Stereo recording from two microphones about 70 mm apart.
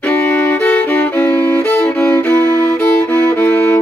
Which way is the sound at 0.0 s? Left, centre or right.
Left.